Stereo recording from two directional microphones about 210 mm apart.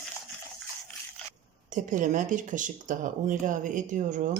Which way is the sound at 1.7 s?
35° right (ahead or behind).